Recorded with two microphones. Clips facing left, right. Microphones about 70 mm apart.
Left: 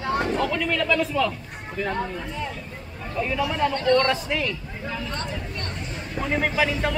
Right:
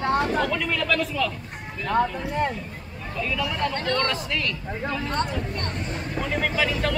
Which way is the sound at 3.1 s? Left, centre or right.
Left.